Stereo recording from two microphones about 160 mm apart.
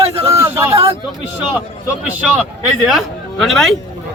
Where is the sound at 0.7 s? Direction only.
40° right (ahead or behind).